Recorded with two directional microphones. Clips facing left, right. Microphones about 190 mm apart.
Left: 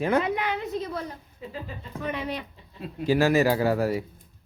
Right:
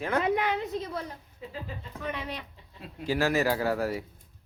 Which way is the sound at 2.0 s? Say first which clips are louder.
Left 5 dB; 10° left (ahead or behind).